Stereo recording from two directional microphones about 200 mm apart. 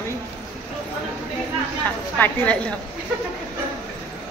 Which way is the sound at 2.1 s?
10° left (ahead or behind).